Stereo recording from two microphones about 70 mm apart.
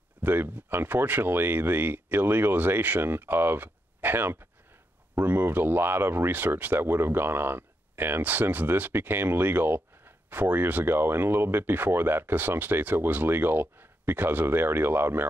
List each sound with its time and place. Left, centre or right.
0.2 s speech: right